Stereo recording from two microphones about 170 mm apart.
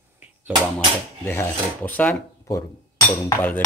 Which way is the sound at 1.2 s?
15° left (ahead or behind).